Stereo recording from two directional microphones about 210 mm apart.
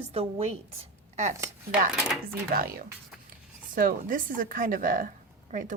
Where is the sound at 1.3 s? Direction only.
15° right (ahead or behind).